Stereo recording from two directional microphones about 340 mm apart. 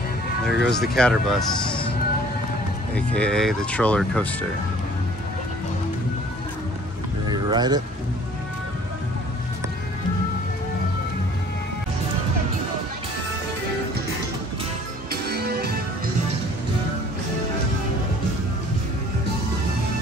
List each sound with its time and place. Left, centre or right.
0.5 s speech: centre
2.9 s speech: centre
7.2 s a sound: centre
15.2 s music: right